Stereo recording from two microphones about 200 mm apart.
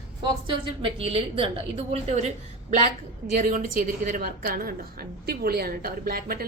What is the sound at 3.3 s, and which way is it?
A woman's voice, 40° right (ahead or behind).